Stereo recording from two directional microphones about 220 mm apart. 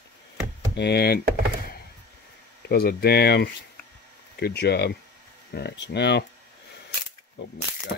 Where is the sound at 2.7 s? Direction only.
45° left (ahead or behind).